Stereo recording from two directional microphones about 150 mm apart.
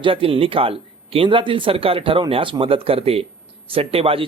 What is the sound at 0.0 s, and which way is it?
A man's voice, 35° right (ahead or behind).